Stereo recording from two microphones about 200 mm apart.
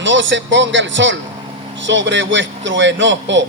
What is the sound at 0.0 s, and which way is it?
A man's voice, 65° right (ahead or behind).